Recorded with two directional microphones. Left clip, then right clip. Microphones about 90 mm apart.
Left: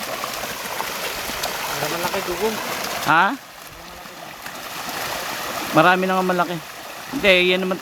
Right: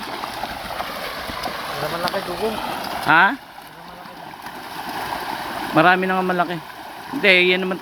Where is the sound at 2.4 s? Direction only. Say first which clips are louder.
Even; 45° left (ahead or behind).